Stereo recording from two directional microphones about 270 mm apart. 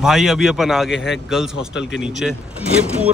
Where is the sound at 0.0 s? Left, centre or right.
Centre.